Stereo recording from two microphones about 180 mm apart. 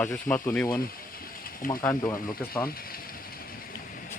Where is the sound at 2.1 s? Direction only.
50° left (ahead or behind).